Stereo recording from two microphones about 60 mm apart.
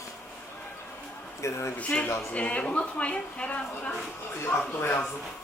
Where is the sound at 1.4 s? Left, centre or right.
Left.